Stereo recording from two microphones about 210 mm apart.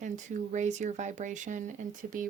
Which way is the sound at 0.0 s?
35° right (ahead or behind).